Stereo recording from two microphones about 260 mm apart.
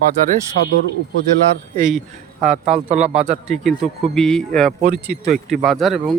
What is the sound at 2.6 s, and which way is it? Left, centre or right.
Speech, right.